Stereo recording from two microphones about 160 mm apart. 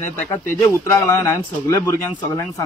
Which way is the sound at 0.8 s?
15° left (ahead or behind).